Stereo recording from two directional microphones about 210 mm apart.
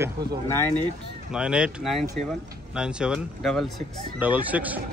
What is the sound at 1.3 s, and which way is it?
A man's voice, 5° right (ahead or behind).